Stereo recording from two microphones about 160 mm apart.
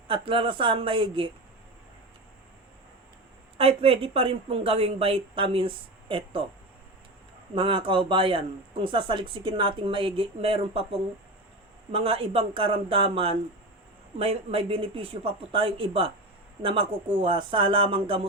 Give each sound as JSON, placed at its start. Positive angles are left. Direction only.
{"t": 0.1, "sound": "speech", "side_deg": -30}
{"t": 3.6, "sound": "speech", "side_deg": -40}
{"t": 7.5, "sound": "speech", "side_deg": -35}